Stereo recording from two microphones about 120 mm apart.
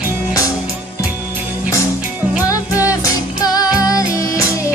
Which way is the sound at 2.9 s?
30° left (ahead or behind).